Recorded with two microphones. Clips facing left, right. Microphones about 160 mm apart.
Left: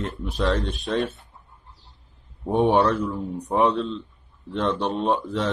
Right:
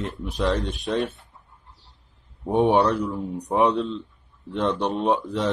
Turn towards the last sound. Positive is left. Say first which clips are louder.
# right 1 dB
turn(degrees=-15)  # may be behind; listen again after turning